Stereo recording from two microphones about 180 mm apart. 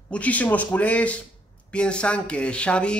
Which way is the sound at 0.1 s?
10° left (ahead or behind).